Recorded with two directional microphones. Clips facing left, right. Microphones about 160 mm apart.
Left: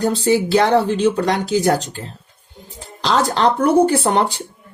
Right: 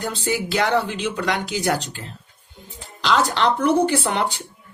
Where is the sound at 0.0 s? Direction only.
35° left (ahead or behind).